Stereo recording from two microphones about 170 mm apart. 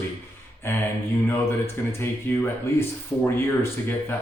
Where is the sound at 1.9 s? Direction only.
15° left (ahead or behind).